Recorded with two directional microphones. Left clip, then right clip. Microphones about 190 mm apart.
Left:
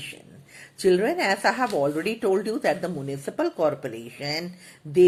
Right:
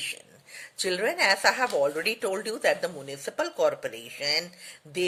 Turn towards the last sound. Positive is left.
turn(degrees=-30)  # may be behind; listen again after turning